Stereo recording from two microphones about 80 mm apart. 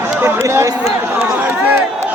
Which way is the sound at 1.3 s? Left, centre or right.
Right.